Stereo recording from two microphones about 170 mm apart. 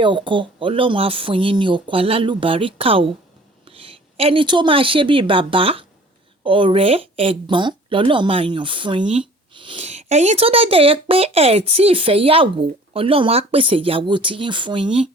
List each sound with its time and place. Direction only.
0.0 s a woman's voice: 30° right (ahead or behind)